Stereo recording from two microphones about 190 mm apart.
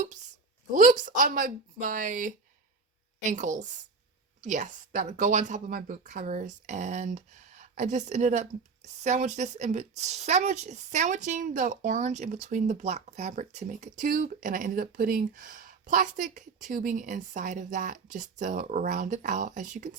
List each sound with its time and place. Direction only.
0.7 s a woman's voice: 45° right (ahead or behind)